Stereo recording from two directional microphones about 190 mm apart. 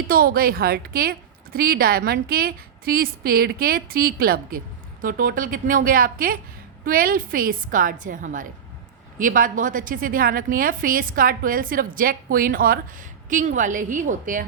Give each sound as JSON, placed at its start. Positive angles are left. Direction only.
{"t": 0.1, "sound": "a woman's voice", "side_deg": -50}